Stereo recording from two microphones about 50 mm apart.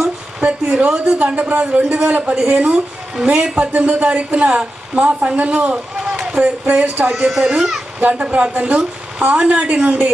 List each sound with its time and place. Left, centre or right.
0.4 s a sound: right
0.9 s a woman's voice: centre
1.2 s a woman's voice: right
3.2 s speech: centre
3.5 s a woman's voice: right
7.2 s a woman's voice: centre